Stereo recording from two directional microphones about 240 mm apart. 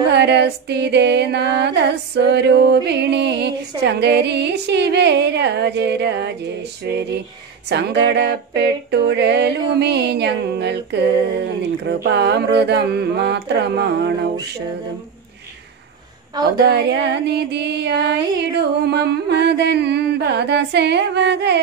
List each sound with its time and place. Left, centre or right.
0.1 s music: right
16.5 s music: right